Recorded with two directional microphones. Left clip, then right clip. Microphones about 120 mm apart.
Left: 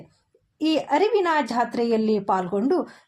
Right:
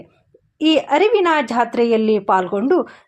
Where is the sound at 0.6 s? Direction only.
25° right (ahead or behind).